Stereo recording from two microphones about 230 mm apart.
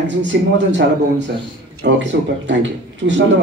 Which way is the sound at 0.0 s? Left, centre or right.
Right.